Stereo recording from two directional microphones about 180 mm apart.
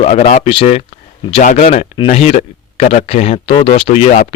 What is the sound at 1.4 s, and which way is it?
Speech, 45° left (ahead or behind).